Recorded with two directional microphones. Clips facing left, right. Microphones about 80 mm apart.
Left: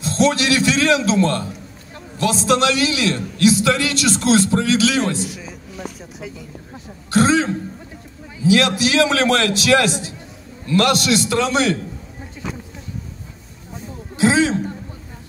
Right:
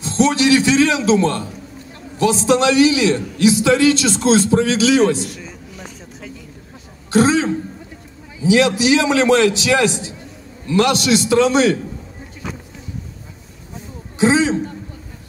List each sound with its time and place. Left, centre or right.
0.0 s a man's voice: right
5.2 s a man's voice: centre
7.1 s a man's voice: right
14.1 s a man's voice: right